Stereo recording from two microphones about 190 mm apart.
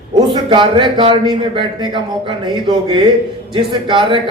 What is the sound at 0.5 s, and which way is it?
A man's voice, 25° right (ahead or behind).